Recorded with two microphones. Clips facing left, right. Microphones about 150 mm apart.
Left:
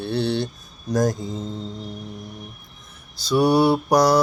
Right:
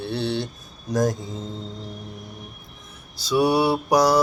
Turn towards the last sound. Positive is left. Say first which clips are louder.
# left 1 dB
turn(degrees=-10)  # may be behind; listen again after turning